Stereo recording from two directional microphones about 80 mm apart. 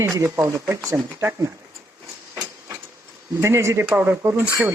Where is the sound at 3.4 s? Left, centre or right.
Right.